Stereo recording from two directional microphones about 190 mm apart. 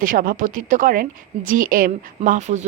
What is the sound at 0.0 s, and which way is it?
A woman's voice, 50° right (ahead or behind).